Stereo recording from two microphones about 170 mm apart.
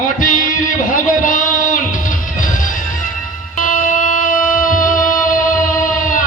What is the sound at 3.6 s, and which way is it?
Music, 50° left (ahead or behind).